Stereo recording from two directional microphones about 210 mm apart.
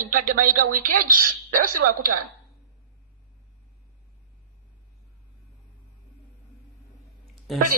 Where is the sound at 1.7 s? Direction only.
90° right.